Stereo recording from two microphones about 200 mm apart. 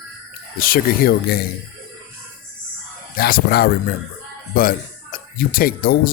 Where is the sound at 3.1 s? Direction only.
50° left (ahead or behind).